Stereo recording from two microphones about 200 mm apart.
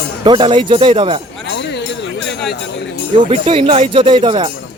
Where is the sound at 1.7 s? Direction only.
60° left (ahead or behind).